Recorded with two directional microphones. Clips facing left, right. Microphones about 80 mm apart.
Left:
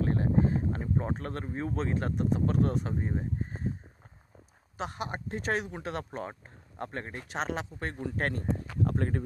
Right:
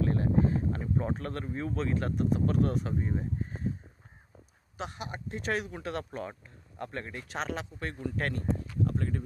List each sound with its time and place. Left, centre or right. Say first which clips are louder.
0.0 s a sound: even; left
0.7 s speech: even; left
4.7 s speech: left 3 dB; left
5.5 s speech: even; left
8.8 s speech: left 2 dB; left